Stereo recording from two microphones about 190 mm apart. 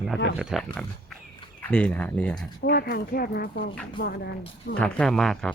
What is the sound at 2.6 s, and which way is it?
Speech, 55° left (ahead or behind).